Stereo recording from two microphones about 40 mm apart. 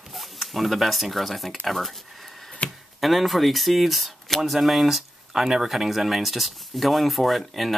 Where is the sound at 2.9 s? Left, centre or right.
Centre.